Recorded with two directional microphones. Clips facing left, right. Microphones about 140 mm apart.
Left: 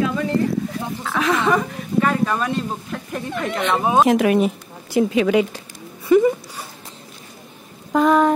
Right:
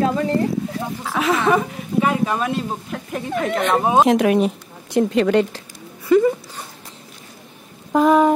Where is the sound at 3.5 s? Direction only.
45° right (ahead or behind).